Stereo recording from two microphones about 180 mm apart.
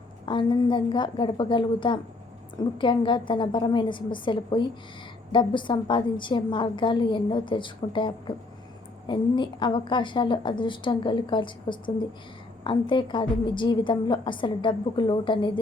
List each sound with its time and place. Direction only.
0.3 s a woman's voice: 25° left (ahead or behind)